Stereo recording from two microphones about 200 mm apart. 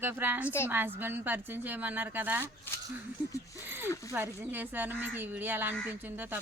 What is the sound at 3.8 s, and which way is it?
Speech, 15° left (ahead or behind).